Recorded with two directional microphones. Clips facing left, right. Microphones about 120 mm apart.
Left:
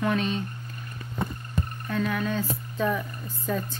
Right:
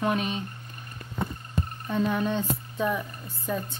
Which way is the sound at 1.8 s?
25° right (ahead or behind).